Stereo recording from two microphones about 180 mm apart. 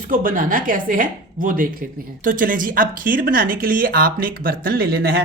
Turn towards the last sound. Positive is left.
turn(degrees=-60)  # may be behind; listen again after turning